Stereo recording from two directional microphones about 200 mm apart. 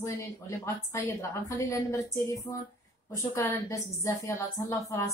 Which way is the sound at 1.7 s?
15° left (ahead or behind).